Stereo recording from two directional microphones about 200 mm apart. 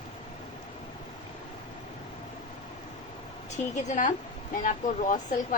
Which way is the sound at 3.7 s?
40° left (ahead or behind).